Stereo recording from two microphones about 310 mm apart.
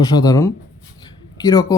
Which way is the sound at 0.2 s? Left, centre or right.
Centre.